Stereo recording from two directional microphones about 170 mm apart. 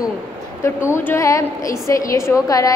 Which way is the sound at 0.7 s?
15° left (ahead or behind).